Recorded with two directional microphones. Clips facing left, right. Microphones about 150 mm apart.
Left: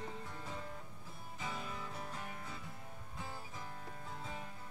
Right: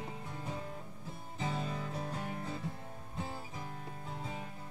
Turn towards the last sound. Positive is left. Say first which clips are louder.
# right 4 dB
turn(degrees=-20)  # may be behind; listen again after turning